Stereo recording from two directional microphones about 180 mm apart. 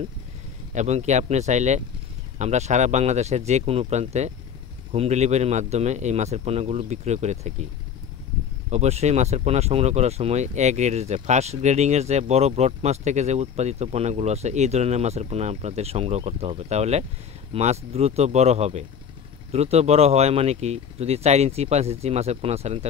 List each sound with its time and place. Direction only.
0.7 s speech: 40° right (ahead or behind)
8.6 s speech: 35° right (ahead or behind)